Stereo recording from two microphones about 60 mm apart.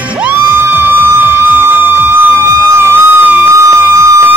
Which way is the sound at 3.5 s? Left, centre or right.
Right.